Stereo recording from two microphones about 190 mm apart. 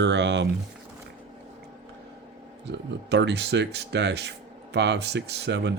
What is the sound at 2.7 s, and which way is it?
Speech, 65° right (ahead or behind).